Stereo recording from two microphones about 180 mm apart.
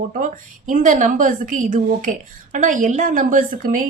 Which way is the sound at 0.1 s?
50° right (ahead or behind).